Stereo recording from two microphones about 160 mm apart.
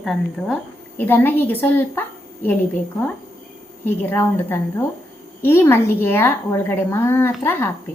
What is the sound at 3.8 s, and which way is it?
Speech, 15° left (ahead or behind).